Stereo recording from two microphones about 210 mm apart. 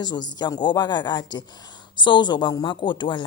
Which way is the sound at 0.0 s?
20° left (ahead or behind).